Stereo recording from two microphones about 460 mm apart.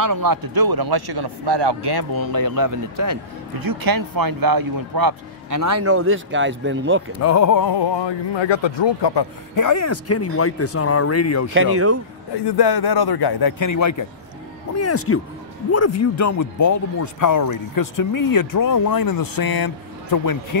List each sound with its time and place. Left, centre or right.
0.0 s speech: right
7.2 s speech: left
9.6 s speech: left
11.5 s speech: right
12.4 s speech: left